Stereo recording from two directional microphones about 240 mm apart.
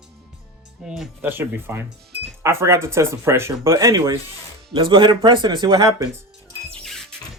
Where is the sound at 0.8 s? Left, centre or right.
Centre.